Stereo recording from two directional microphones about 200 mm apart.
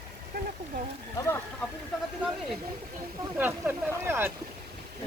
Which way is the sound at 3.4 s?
10° right (ahead or behind).